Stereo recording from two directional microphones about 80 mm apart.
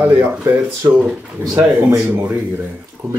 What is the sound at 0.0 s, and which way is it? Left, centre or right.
Speech, right.